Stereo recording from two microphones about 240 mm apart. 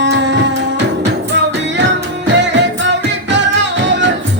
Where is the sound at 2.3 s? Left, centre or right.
Right.